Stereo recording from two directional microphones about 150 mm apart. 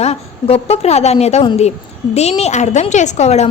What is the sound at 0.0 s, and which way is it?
A woman's voice, 45° left (ahead or behind).